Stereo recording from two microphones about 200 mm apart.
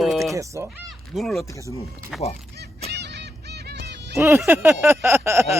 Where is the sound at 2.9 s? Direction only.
55° right (ahead or behind).